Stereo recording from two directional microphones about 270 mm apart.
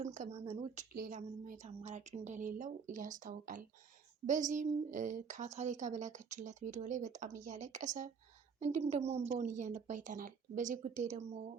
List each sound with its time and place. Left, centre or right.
0.0 s a woman's voice: right